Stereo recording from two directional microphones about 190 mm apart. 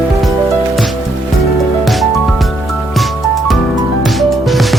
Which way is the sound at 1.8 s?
Centre (ahead or behind).